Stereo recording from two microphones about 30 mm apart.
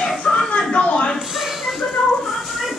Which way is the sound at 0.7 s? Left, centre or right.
Left.